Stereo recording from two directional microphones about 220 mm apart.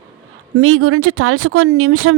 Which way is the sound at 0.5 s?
70° right (ahead or behind).